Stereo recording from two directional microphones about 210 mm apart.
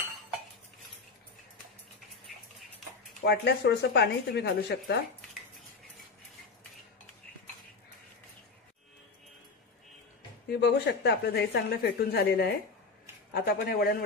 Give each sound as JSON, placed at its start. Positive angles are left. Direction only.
{"t": 3.3, "sound": "speech", "side_deg": 50}
{"t": 10.5, "sound": "speech", "side_deg": 50}